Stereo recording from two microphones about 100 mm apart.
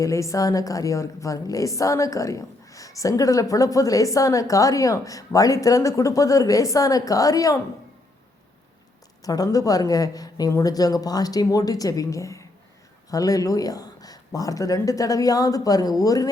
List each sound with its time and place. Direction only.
0.0 s a woman's voice: 30° left (ahead or behind)
9.2 s a woman's voice: 35° left (ahead or behind)